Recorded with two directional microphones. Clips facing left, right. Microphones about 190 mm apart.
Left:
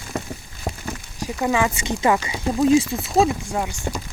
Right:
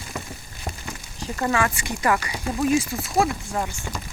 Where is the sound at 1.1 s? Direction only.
10° left (ahead or behind).